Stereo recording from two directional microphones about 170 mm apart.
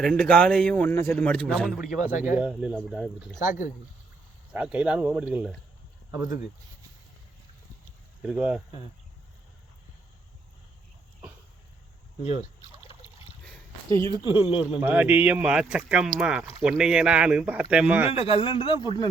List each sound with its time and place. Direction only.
0.0 s a man's voice: 5° left (ahead or behind)
2.2 s a man's voice: 10° right (ahead or behind)
3.3 s speech: 50° left (ahead or behind)
4.5 s speech: 5° right (ahead or behind)
8.2 s a man's voice: 5° right (ahead or behind)
12.2 s speech: 35° left (ahead or behind)
13.9 s speech: 20° left (ahead or behind)
14.5 s speech: 5° right (ahead or behind)
18.1 s a man's voice: 35° left (ahead or behind)